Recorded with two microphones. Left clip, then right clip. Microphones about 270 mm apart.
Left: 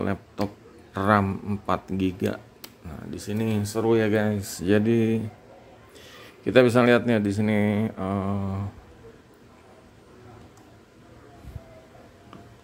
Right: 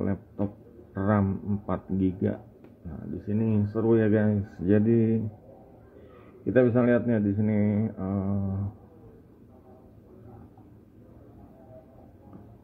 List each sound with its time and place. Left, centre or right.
0.0 s speech: centre
6.4 s speech: centre